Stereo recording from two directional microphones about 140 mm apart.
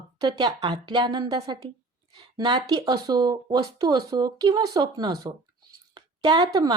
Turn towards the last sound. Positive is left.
turn(degrees=-30)  # may be behind; listen again after turning